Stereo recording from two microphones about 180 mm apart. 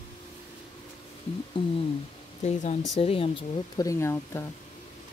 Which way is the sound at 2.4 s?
40° left (ahead or behind).